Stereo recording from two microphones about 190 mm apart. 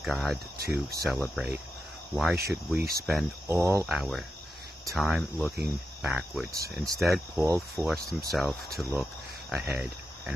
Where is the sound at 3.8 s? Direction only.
Centre (ahead or behind).